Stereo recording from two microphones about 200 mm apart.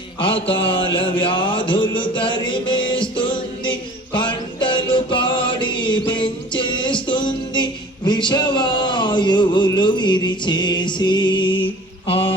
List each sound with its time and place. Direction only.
0.2 s mantra: 25° left (ahead or behind)
1.2 s music: 25° left (ahead or behind)